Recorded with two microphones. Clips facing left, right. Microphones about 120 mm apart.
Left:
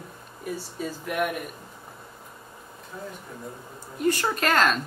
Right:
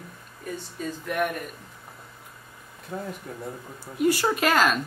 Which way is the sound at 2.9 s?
60° right (ahead or behind).